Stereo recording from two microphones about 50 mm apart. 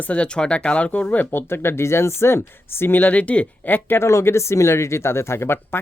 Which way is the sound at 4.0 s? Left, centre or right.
Left.